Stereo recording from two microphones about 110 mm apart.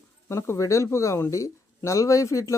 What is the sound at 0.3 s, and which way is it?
Speech, 25° left (ahead or behind).